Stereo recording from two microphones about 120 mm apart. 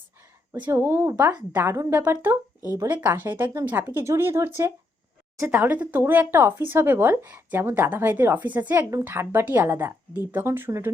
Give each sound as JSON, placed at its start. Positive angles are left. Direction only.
{"t": 0.5, "sound": "a woman's voice", "side_deg": -15}